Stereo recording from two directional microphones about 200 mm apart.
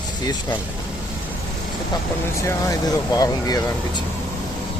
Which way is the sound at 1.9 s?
15° left (ahead or behind).